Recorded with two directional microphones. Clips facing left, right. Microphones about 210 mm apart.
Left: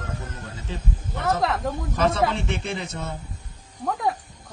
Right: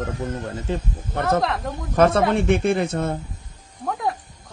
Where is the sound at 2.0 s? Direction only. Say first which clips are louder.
Right 6 dB; 55° right (ahead or behind).